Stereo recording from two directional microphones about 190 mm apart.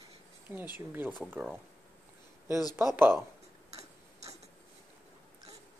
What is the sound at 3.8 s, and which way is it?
Tick-tock, 35° right (ahead or behind).